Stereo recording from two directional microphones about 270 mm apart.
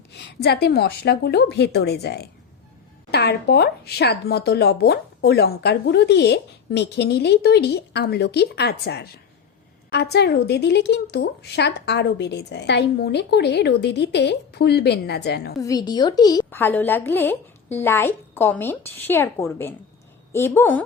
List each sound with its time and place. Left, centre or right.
0.1 s speech: left
15.5 s a woman's voice: centre